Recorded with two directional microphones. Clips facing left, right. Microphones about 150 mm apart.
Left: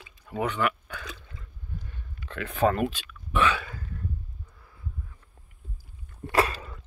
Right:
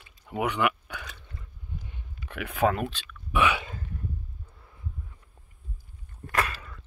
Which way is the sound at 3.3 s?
15° right (ahead or behind).